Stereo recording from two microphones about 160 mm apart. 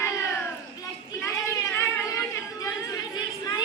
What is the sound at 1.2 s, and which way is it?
Chatter, 20° left (ahead or behind).